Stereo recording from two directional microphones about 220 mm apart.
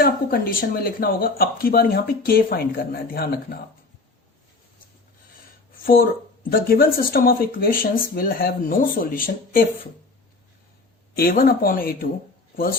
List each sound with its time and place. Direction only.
0.0 s speech: 40° left (ahead or behind)
5.8 s speech: 40° left (ahead or behind)
11.2 s speech: 40° left (ahead or behind)